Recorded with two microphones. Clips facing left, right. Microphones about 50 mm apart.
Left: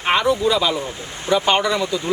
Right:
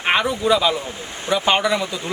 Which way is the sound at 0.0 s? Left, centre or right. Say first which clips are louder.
Left 2 dB; centre.